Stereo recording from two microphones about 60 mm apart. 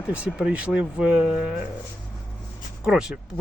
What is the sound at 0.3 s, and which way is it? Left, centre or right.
Speech, centre.